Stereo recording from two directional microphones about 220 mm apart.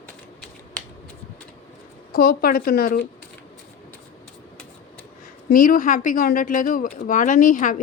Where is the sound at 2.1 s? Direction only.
40° left (ahead or behind).